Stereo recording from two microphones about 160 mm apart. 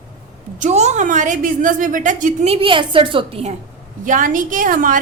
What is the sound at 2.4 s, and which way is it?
A woman's voice, 35° right (ahead or behind).